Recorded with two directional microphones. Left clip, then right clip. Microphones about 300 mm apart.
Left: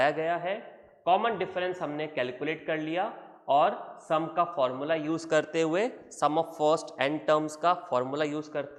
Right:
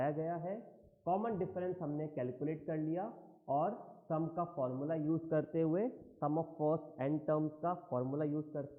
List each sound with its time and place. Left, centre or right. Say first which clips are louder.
0.0 s a man's voice: left 11 dB; centre
6.3 s a man's voice: left 8 dB; left
7.0 s a man's voice: left 9 dB; centre